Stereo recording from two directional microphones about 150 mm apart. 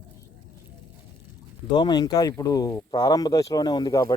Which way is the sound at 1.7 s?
30° left (ahead or behind).